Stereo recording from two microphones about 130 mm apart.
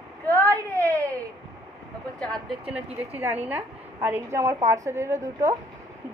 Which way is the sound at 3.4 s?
15° right (ahead or behind).